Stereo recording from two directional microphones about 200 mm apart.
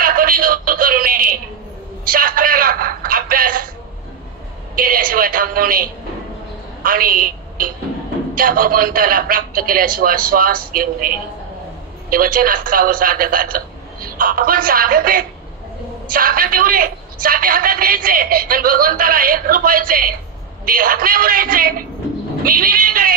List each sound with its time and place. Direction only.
0.0 s a man's voice: 45° right (ahead or behind)
4.7 s a man's voice: 45° right (ahead or behind)
12.1 s a man's voice: 45° right (ahead or behind)